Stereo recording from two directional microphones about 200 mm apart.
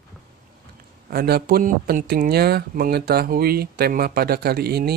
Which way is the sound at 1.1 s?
50° right (ahead or behind).